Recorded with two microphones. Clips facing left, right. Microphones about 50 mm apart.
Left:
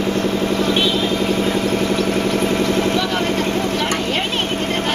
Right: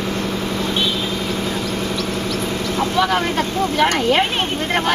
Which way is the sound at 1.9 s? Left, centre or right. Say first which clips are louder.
Left 5 dB; left.